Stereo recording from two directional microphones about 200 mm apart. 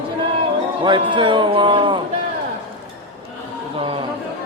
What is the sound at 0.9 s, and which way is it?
A man's voice, 25° right (ahead or behind).